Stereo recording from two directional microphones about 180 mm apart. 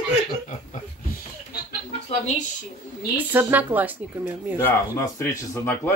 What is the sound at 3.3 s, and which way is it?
Speech, 10° right (ahead or behind).